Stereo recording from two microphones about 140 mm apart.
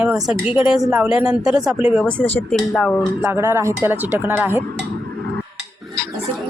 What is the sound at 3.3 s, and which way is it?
Speech, 20° right (ahead or behind).